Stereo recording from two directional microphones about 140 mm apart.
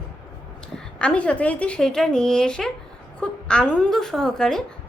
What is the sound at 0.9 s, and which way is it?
A woman's voice, 10° left (ahead or behind).